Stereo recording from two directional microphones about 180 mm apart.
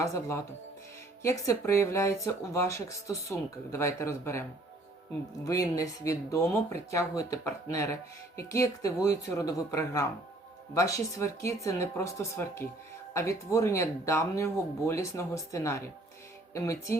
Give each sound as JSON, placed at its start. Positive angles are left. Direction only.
{"t": 0.0, "sound": "speech", "side_deg": 15}
{"t": 5.5, "sound": "speech", "side_deg": 20}